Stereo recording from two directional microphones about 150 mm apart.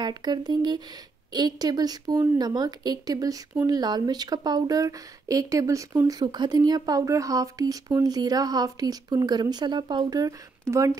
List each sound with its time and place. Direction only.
0.0 s a woman's voice: 30° right (ahead or behind)